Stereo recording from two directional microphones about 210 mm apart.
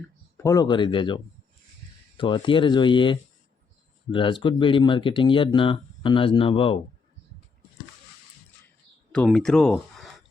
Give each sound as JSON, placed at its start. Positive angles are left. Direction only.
{"t": 0.3, "sound": "speech", "side_deg": 15}
{"t": 9.1, "sound": "speech", "side_deg": 5}